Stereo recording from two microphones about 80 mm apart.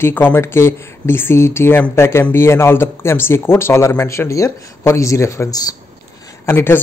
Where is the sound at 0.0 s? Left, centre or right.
Left.